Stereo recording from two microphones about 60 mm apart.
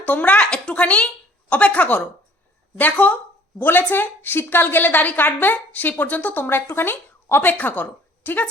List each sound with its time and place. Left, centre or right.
0.0 s a woman's voice: left